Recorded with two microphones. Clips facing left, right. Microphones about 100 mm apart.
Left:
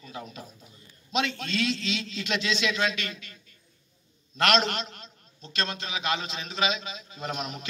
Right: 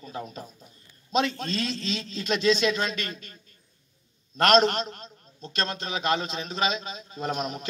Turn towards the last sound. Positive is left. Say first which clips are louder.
# right 4 dB
turn(degrees=-40)  # may be behind; listen again after turning